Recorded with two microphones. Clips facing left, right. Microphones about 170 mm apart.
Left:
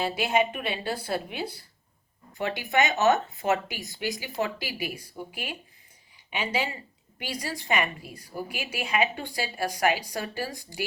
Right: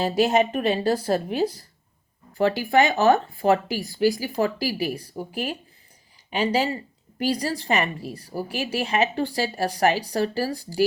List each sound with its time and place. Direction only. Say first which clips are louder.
0.2 s a woman's voice: right 8 dB; 40° right (ahead or behind)
2.7 s a woman's voice: right 4 dB; 30° right (ahead or behind)